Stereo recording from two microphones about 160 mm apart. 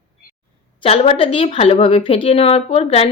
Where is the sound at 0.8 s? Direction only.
35° left (ahead or behind).